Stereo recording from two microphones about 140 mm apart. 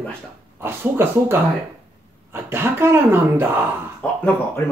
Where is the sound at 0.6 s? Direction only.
15° right (ahead or behind).